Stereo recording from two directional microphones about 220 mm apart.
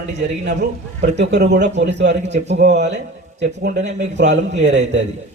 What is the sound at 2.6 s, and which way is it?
Speech, 50° right (ahead or behind).